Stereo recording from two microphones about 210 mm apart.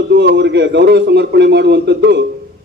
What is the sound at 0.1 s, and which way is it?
A man's voice, 55° right (ahead or behind).